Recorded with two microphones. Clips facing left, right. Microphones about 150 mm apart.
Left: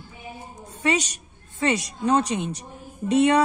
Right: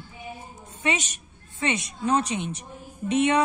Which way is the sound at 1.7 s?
35° left (ahead or behind).